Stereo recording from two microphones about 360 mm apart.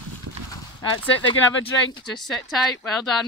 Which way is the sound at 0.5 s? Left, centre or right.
Centre.